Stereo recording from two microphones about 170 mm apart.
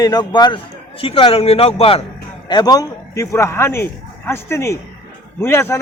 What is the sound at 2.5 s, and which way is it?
A man's voice, 25° left (ahead or behind).